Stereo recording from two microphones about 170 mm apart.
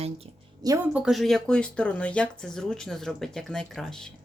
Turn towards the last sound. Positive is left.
turn(degrees=5)  # may be behind; listen again after turning